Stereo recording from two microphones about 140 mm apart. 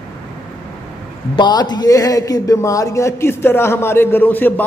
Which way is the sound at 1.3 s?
30° left (ahead or behind).